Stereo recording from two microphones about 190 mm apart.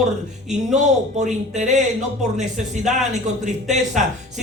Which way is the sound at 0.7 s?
40° right (ahead or behind).